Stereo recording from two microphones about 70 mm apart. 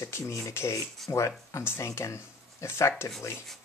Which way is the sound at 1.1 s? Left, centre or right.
Left.